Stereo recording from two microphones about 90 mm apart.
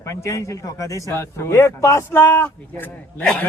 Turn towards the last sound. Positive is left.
turn(degrees=20)  # may be behind; listen again after turning